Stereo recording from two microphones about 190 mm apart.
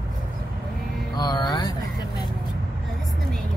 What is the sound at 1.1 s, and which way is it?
Speech, 20° left (ahead or behind).